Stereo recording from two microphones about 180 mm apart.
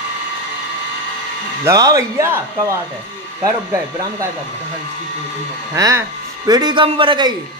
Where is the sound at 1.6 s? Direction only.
20° right (ahead or behind).